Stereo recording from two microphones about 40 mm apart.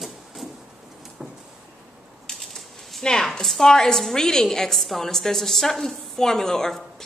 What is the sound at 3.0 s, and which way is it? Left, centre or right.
A woman's voice, centre.